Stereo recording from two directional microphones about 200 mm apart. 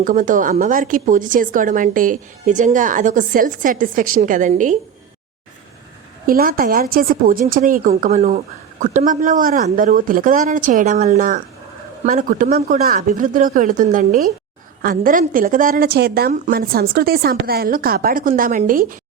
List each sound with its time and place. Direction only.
0.0 s a woman's voice: 40° right (ahead or behind)
6.2 s a woman's voice: 45° right (ahead or behind)